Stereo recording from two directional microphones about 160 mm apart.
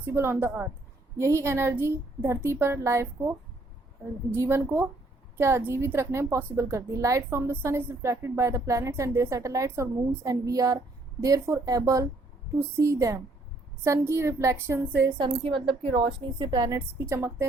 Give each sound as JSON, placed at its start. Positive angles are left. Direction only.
{"t": 0.0, "sound": "a woman's voice", "side_deg": -15}
{"t": 15.2, "sound": "a woman's voice", "side_deg": -30}